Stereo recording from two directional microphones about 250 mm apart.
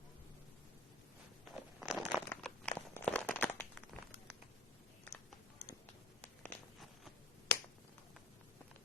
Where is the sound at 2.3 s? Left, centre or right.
Centre.